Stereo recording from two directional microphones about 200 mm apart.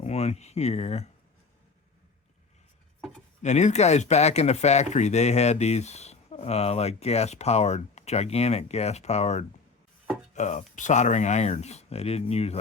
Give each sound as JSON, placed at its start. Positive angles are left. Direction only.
{"t": 0.0, "sound": "speech", "side_deg": 30}
{"t": 3.4, "sound": "speech", "side_deg": 35}